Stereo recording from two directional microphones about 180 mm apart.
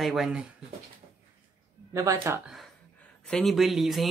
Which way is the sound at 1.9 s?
15° right (ahead or behind).